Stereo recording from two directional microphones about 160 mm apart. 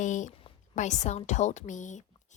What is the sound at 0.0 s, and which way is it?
A woman's voice, 50° left (ahead or behind).